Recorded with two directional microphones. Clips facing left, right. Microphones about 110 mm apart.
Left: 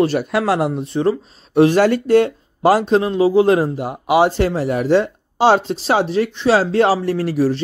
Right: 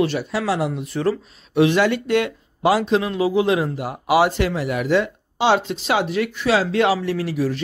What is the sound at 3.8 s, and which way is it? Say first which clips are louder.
Speech: left 3 dB; 25° left (ahead or behind).